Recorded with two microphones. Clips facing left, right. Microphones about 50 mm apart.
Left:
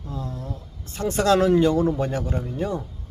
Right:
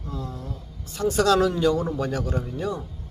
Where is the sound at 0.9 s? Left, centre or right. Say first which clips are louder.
Even; left.